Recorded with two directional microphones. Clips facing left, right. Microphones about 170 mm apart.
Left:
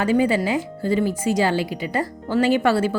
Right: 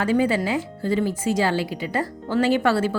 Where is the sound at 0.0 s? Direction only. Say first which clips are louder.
Left 2 dB; 15° left (ahead or behind).